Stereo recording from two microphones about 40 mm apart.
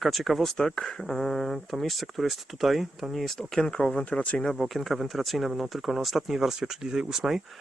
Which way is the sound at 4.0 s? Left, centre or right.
Left.